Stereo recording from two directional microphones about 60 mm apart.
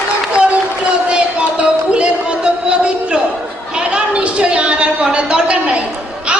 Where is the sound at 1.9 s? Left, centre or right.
Centre.